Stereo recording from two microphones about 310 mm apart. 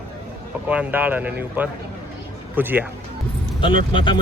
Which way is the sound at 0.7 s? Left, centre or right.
Centre.